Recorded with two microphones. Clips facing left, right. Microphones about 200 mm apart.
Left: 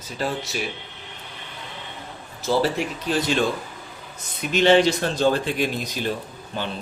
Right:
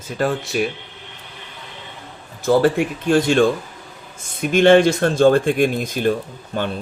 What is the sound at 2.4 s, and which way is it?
Speech, 50° right (ahead or behind).